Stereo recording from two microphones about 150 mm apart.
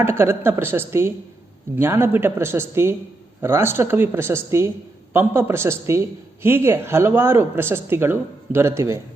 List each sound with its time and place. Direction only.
0.0 s a woman's voice: 15° right (ahead or behind)